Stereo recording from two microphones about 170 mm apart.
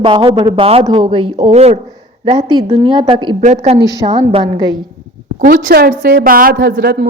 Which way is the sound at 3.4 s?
40° right (ahead or behind).